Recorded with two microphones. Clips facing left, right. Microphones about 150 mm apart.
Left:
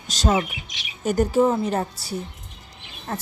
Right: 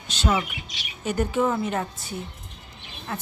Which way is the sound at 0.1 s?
40° left (ahead or behind).